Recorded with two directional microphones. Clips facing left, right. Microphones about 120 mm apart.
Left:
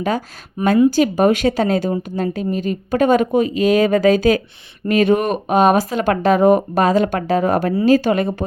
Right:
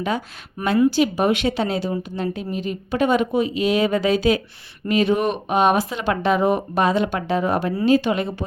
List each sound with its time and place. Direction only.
0.9 s speech: 45° left (ahead or behind)